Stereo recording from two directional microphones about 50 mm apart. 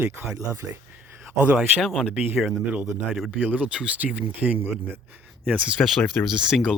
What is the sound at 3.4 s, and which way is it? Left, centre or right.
Speech, right.